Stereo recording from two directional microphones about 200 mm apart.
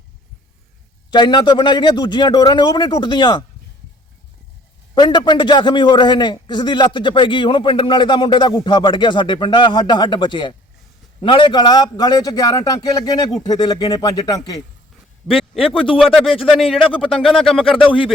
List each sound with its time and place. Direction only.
1.1 s a man's voice: 20° left (ahead or behind)
4.9 s a man's voice: 25° left (ahead or behind)
15.4 s a man's voice: centre (ahead or behind)
15.7 s a man's voice: 25° left (ahead or behind)